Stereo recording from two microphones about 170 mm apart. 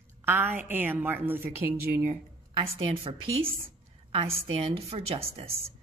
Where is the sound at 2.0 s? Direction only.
40° right (ahead or behind).